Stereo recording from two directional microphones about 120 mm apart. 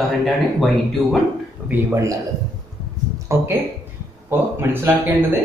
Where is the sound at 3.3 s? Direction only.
25° right (ahead or behind).